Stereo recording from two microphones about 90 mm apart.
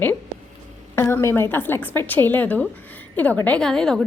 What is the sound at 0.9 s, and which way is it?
A woman's voice, 30° left (ahead or behind).